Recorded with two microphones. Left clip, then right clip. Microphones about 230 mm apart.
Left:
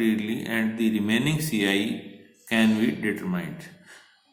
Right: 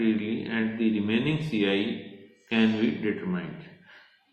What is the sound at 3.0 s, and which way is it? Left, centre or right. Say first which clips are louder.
Speech: left 1 dB; left.